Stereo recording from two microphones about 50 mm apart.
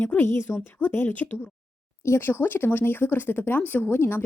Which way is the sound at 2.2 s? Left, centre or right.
Left.